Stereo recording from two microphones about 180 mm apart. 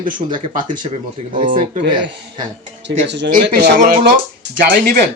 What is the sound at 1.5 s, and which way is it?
Speech, 45° right (ahead or behind).